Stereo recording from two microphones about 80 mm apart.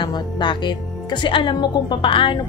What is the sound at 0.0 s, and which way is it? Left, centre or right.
A woman's voice, left.